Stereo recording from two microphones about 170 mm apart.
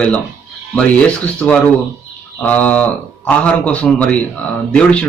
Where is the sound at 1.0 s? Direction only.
5° left (ahead or behind).